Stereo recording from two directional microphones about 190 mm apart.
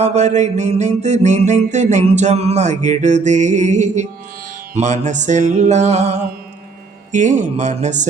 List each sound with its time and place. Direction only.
0.0 s mantra: 35° right (ahead or behind)